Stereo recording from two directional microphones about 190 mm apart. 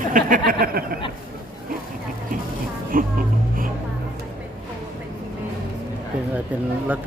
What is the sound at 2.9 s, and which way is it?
Speech, 45° right (ahead or behind).